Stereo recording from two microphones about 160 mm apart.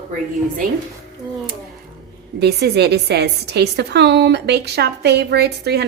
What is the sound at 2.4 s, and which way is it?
A woman's voice, 90° right.